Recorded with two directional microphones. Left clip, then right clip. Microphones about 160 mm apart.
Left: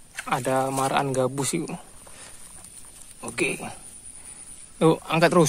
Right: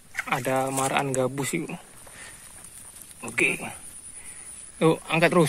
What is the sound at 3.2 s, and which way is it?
Speech, 15° left (ahead or behind).